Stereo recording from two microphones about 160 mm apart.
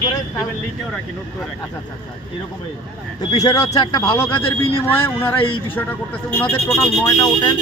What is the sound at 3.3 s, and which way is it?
Speech, 20° left (ahead or behind).